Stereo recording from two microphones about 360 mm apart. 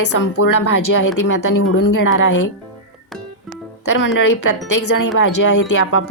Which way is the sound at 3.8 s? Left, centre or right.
Left.